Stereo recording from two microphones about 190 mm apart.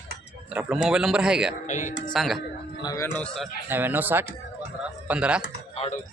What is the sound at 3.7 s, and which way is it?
Speech, 10° right (ahead or behind).